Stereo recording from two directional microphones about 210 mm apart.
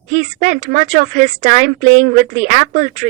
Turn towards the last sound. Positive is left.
turn(degrees=-35)  # may be behind; listen again after turning